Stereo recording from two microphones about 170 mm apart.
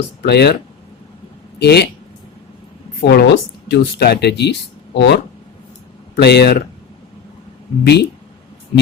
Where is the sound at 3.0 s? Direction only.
70° left (ahead or behind).